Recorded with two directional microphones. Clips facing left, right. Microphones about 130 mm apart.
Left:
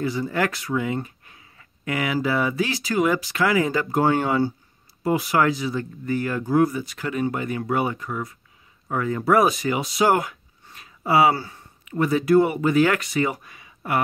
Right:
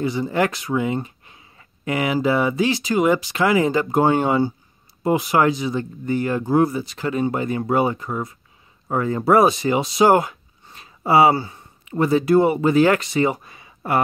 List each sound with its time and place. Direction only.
0.0 s speech: 20° right (ahead or behind)